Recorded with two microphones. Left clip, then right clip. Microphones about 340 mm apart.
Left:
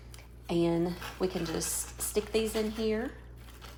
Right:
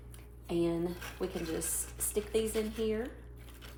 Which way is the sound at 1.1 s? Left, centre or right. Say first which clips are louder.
Left 5 dB; left.